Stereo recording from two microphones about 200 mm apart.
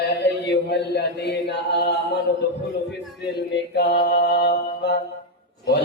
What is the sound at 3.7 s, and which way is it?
Mantra, 55° left (ahead or behind).